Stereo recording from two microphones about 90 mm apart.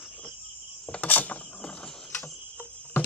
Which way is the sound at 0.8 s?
15° left (ahead or behind).